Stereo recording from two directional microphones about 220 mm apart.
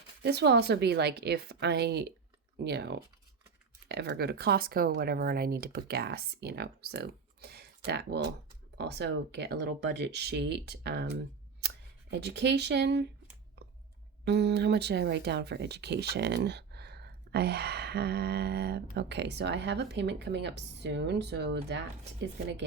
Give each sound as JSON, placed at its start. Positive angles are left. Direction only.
{"t": 0.2, "sound": "speech", "side_deg": -50}
{"t": 12.2, "sound": "speech", "side_deg": -50}
{"t": 14.3, "sound": "speech", "side_deg": -50}